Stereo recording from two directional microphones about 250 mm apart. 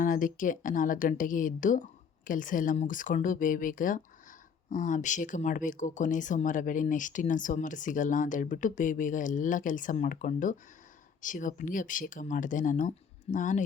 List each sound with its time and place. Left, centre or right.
0.0 s speech: left